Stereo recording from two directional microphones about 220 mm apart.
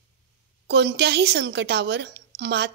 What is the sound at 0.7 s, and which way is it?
A woman's voice, 50° right (ahead or behind).